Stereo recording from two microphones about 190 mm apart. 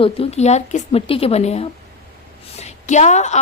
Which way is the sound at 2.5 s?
35° left (ahead or behind).